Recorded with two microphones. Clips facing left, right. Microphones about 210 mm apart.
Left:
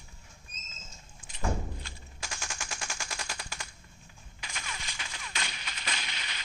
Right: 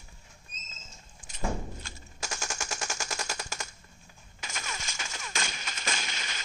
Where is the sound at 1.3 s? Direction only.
45° right (ahead or behind).